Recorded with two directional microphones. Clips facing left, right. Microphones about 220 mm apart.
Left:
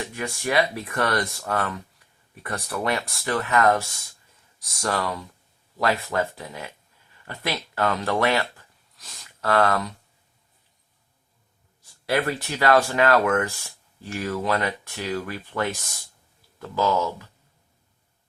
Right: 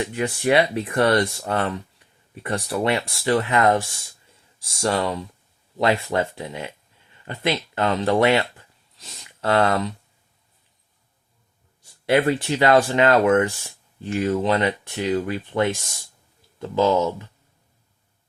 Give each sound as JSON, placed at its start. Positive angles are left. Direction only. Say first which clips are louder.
{"t": 0.1, "sound": "speech", "louder": "right 6 dB", "side_deg": -30}
{"t": 12.0, "sound": "speech", "louder": "right 6 dB", "side_deg": -25}